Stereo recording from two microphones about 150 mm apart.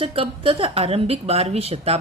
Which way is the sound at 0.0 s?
35° right (ahead or behind).